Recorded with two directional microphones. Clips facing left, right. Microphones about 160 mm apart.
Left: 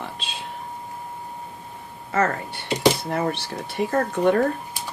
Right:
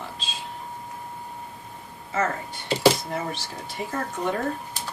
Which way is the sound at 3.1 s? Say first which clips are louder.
Left 6 dB; 60° left (ahead or behind).